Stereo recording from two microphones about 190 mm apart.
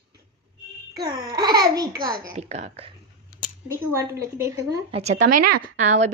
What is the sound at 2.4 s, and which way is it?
Speech, 35° right (ahead or behind).